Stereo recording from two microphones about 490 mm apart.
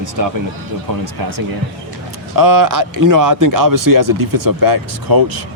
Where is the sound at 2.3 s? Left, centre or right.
Right.